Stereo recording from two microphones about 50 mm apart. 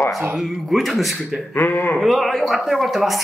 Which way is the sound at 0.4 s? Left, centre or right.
Centre.